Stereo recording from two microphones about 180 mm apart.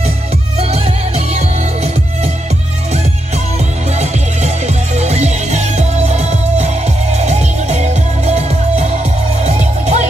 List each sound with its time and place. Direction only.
0.6 s music: 35° right (ahead or behind)
4.0 s music: 40° right (ahead or behind)